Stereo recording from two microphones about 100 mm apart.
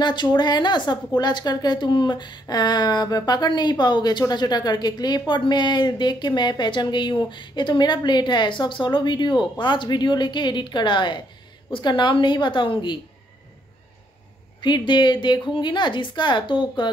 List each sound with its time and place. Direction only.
0.0 s speech: 50° left (ahead or behind)
14.6 s speech: 50° left (ahead or behind)